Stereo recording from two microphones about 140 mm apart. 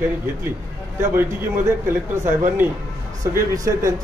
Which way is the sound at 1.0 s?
20° right (ahead or behind).